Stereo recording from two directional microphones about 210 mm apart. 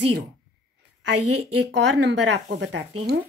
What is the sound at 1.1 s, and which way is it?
Speech, 90° right.